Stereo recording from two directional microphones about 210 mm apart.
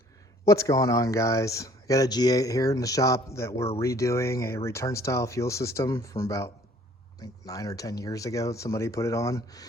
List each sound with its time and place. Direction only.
0.4 s speech: 15° left (ahead or behind)